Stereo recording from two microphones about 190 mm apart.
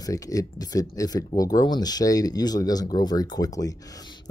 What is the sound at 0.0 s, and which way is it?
Speech, 20° left (ahead or behind).